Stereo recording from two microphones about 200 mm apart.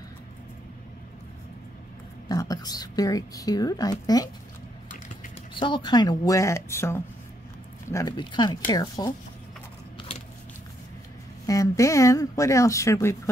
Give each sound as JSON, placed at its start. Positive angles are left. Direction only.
{"t": 2.2, "sound": "speech", "side_deg": 20}
{"t": 5.5, "sound": "speech", "side_deg": 25}
{"t": 11.4, "sound": "speech", "side_deg": 15}